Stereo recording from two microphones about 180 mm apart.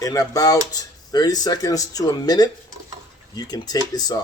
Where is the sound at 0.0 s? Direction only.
20° left (ahead or behind).